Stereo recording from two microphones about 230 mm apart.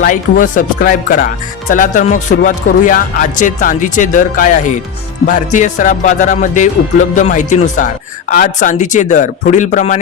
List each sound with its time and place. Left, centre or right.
0.0 s speech: left